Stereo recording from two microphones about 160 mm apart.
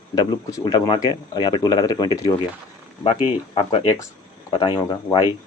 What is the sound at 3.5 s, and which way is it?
Speech, 35° left (ahead or behind).